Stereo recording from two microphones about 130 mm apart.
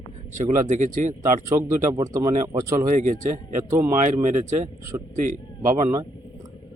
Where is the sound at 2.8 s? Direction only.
75° right (ahead or behind).